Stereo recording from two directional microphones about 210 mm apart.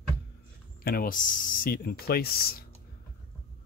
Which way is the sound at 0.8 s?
45° left (ahead or behind).